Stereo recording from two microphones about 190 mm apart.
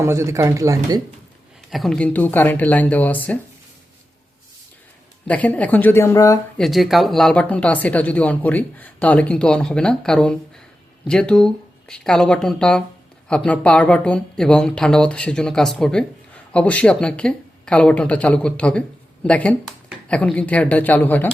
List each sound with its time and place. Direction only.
0.0 s speech: 15° right (ahead or behind)
1.7 s speech: centre (ahead or behind)
5.3 s speech: 10° left (ahead or behind)
6.6 s speech: centre (ahead or behind)